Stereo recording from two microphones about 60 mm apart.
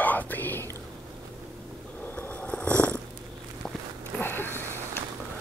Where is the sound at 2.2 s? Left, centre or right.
Left.